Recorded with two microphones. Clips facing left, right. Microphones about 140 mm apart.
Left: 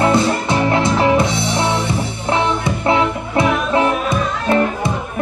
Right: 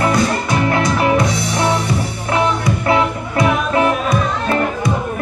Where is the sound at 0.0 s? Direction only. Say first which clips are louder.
Left 1 dB; 25° left (ahead or behind).